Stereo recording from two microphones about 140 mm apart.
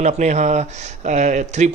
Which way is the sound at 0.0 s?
55° right (ahead or behind).